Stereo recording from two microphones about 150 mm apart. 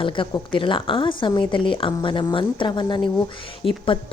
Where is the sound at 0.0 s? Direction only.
35° left (ahead or behind).